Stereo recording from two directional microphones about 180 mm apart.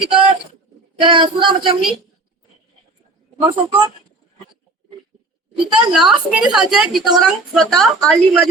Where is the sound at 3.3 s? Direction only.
30° right (ahead or behind).